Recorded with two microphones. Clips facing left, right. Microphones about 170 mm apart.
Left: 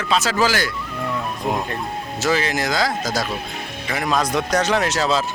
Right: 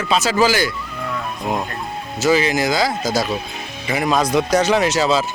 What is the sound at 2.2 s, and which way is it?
Speech, centre (ahead or behind).